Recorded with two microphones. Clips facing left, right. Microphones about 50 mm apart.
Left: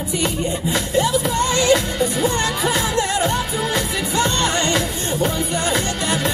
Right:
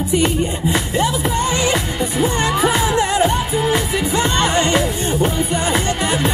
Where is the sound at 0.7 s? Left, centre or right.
Right.